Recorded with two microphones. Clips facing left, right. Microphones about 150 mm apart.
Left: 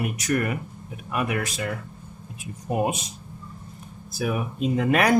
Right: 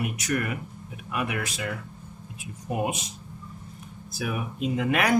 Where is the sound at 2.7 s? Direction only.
40° left (ahead or behind).